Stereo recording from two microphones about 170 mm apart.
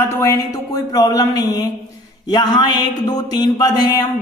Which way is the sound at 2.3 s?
25° left (ahead or behind).